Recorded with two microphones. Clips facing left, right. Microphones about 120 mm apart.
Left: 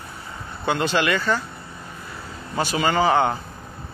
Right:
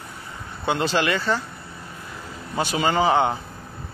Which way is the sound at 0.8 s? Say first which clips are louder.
Left 1 dB; 35° right (ahead or behind).